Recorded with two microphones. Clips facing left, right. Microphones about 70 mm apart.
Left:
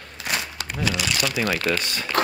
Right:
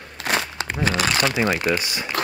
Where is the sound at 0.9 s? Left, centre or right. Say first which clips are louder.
Right 4 dB; right.